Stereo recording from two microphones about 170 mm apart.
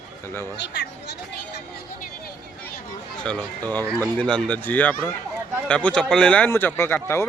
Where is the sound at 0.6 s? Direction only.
90° left.